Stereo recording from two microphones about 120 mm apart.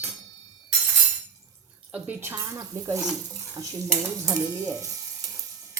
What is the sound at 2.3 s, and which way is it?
Speech, 30° right (ahead or behind).